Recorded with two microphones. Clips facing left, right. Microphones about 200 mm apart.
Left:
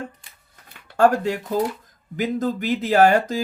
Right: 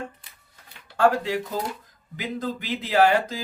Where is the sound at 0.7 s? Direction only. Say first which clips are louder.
Left 3 dB; 50° left (ahead or behind).